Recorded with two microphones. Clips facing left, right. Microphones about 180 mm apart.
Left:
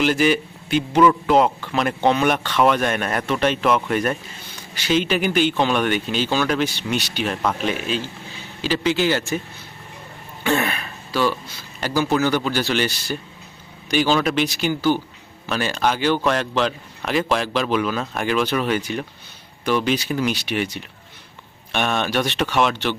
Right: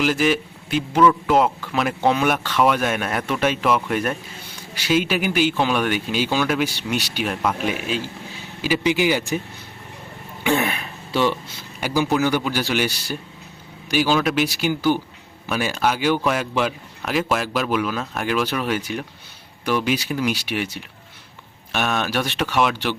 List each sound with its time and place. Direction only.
0.0 s a man's voice: centre (ahead or behind)
10.4 s speech: 15° right (ahead or behind)
11.8 s a man's voice: 10° right (ahead or behind)